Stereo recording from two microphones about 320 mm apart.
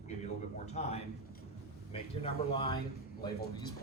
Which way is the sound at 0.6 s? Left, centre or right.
Centre.